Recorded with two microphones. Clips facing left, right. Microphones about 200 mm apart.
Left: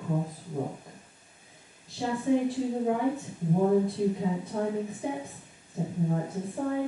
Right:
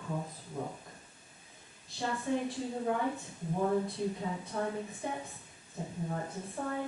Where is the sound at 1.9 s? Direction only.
10° left (ahead or behind).